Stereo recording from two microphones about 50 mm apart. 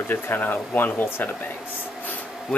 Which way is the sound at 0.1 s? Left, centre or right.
Left.